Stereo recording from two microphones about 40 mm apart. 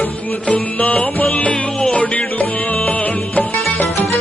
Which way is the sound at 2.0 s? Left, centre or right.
Left.